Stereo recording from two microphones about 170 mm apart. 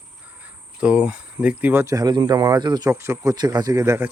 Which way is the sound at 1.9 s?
25° right (ahead or behind).